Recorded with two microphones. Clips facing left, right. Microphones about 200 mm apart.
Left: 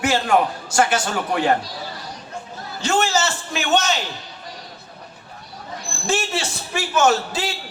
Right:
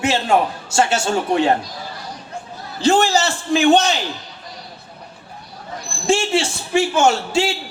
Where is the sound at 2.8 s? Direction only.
35° right (ahead or behind).